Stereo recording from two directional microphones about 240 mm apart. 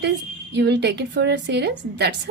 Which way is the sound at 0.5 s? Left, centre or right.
Right.